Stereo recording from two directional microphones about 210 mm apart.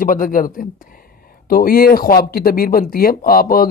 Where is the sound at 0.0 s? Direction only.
40° left (ahead or behind).